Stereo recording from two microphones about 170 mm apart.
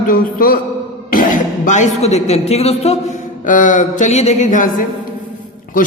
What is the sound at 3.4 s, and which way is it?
A man's voice, 50° left (ahead or behind).